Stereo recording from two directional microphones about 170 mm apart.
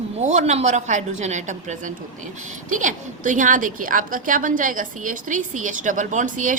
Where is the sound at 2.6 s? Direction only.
50° right (ahead or behind).